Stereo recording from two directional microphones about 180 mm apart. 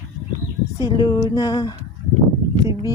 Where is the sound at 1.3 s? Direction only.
20° left (ahead or behind).